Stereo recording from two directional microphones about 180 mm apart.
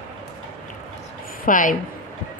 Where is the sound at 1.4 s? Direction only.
45° left (ahead or behind).